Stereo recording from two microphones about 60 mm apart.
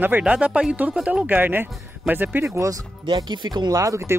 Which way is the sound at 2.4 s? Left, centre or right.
Right.